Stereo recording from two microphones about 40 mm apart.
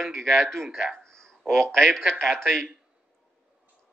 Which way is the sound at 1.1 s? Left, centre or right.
Centre.